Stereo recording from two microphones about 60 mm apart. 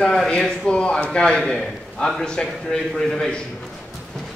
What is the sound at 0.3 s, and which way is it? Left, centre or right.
A man's voice, centre.